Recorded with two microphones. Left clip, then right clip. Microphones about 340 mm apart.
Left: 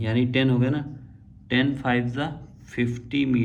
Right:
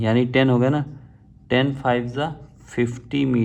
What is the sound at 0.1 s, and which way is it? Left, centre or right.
Speech, centre.